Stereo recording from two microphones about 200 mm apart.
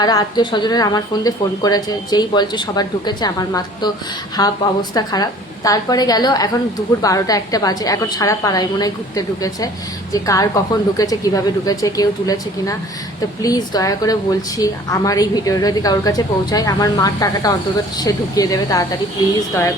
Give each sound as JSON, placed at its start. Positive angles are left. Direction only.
{"t": 0.0, "sound": "a woman's voice", "side_deg": 20}